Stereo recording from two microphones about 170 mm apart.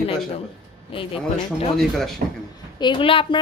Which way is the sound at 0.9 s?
30° left (ahead or behind).